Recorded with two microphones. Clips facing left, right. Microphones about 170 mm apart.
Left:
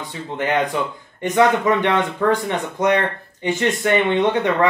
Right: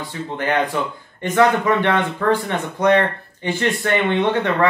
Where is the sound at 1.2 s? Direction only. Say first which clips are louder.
Even; 20° left (ahead or behind).